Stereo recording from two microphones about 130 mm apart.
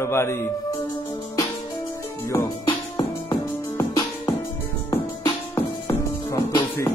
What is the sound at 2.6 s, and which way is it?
Music, 35° left (ahead or behind).